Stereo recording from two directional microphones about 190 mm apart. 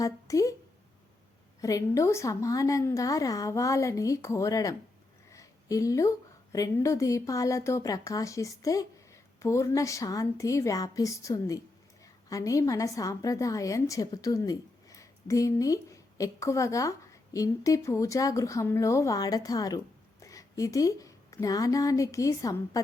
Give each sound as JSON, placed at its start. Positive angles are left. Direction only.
{"t": 0.0, "sound": "speech", "side_deg": 15}
{"t": 1.6, "sound": "a woman's voice", "side_deg": 15}